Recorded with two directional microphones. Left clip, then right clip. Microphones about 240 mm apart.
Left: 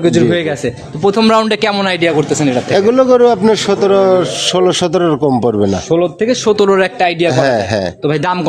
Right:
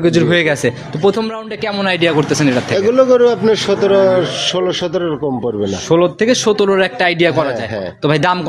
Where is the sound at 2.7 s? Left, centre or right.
Left.